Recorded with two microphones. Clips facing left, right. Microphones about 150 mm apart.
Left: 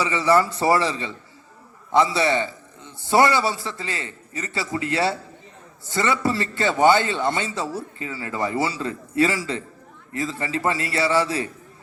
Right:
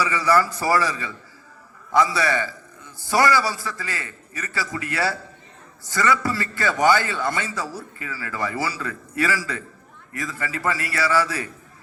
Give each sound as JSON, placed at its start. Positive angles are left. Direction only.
{"t": 0.0, "sound": "a man's voice", "side_deg": 25}